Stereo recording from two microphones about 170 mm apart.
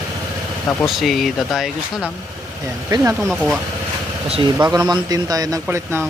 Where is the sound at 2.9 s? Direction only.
20° right (ahead or behind).